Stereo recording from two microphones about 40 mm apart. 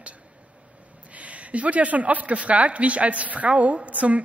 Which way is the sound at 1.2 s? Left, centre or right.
Right.